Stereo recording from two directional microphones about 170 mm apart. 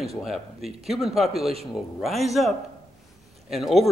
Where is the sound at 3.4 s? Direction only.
Centre (ahead or behind).